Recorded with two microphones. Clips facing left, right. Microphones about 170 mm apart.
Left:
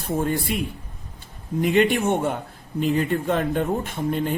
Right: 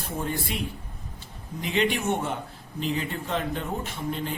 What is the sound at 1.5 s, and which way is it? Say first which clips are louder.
A woman's voice: left 7 dB; 50° left (ahead or behind).